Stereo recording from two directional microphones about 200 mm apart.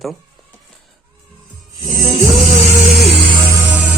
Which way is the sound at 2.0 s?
20° right (ahead or behind).